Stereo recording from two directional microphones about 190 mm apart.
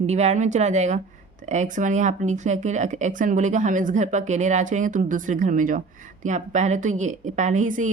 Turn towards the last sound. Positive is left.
turn(degrees=-40)  # may be behind; listen again after turning